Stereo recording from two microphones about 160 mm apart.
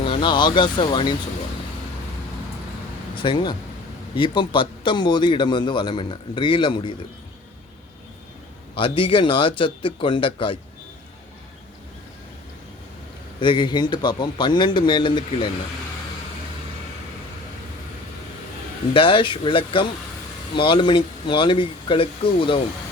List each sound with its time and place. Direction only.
0.0 s speech: 35° left (ahead or behind)
3.2 s a man's voice: 30° left (ahead or behind)
8.8 s speech: 35° left (ahead or behind)
13.4 s a man's voice: 30° left (ahead or behind)
18.9 s speech: 30° left (ahead or behind)